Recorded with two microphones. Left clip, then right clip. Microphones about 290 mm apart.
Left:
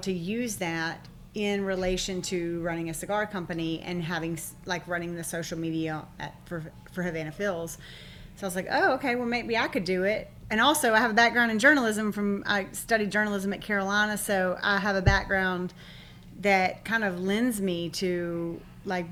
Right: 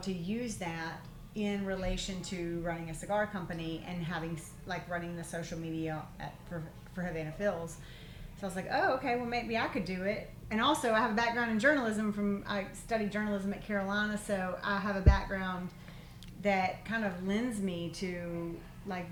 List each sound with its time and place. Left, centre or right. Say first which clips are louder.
0.0 s a woman's voice: left 7 dB; left